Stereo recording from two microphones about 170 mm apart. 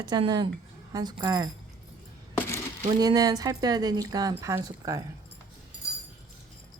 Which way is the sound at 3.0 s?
20° right (ahead or behind).